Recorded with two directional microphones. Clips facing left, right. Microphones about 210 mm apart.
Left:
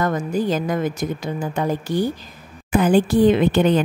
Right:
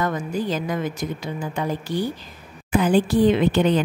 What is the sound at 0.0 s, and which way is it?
A woman's voice, 45° left (ahead or behind).